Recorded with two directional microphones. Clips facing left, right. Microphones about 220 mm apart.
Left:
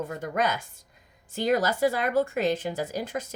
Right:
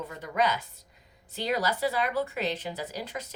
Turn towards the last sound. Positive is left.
turn(degrees=50)  # may be behind; listen again after turning